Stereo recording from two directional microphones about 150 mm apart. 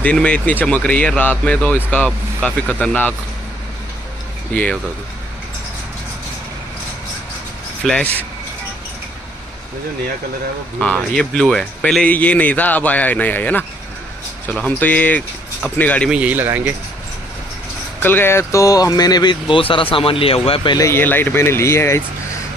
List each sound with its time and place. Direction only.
0.0 s speech: 10° left (ahead or behind)
7.8 s speech: 5° left (ahead or behind)
10.8 s speech: 5° left (ahead or behind)
16.1 s a man's voice: 10° right (ahead or behind)
18.0 s speech: 15° left (ahead or behind); by 20.7 s 40° left (ahead or behind)
20.7 s speech: 20° left (ahead or behind)